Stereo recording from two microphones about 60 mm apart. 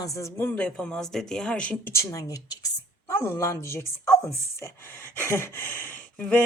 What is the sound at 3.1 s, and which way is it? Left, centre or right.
Speech, left.